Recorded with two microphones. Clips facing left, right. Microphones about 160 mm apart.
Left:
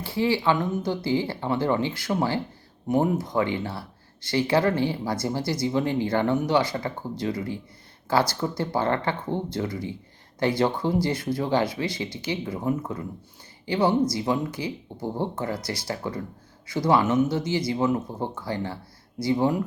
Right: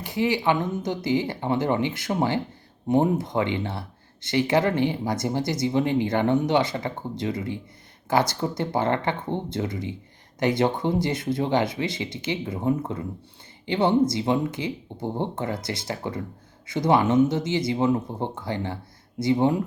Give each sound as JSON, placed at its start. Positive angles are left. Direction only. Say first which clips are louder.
{"t": 0.0, "sound": "speech", "louder": "even", "side_deg": -20}